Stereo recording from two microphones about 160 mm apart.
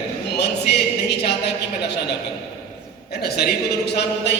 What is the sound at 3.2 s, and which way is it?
A man's voice, 85° left.